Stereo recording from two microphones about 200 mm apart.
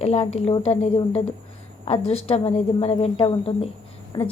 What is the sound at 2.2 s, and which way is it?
A woman's voice, 30° left (ahead or behind).